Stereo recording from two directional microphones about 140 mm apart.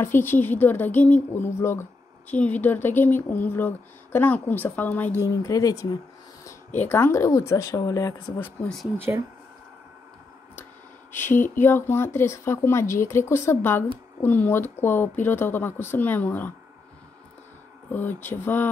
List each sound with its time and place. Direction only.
0.0 s speech: 15° left (ahead or behind)
8.4 s speech: 15° left (ahead or behind)
8.9 s speech: 15° right (ahead or behind)
11.1 s speech: 15° left (ahead or behind)
17.9 s speech: 15° left (ahead or behind)